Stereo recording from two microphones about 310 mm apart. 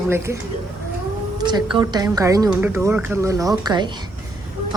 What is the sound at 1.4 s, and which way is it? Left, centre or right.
A woman's voice, centre.